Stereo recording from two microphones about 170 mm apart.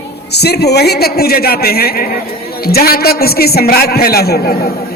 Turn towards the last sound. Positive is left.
turn(degrees=65)  # may be behind; listen again after turning